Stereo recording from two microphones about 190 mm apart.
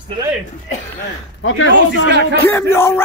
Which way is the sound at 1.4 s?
90° left.